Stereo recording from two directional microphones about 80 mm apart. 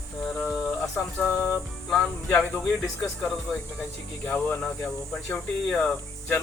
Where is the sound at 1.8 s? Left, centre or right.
Centre.